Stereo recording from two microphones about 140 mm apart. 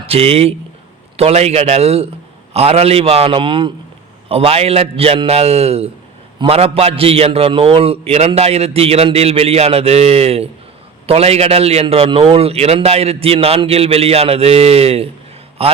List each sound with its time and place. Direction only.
0.1 s a man's voice: 45° right (ahead or behind)